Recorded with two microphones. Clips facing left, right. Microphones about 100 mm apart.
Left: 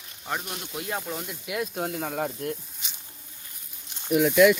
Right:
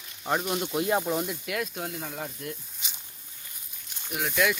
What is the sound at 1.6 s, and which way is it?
Speech, 40° left (ahead or behind).